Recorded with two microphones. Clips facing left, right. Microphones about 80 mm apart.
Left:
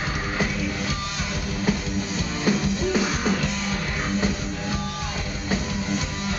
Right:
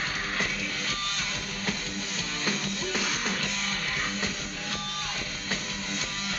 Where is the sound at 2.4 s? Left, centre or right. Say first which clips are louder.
Left 10 dB; centre.